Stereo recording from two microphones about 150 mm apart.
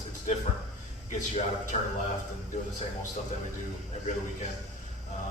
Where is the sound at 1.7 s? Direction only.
60° left (ahead or behind).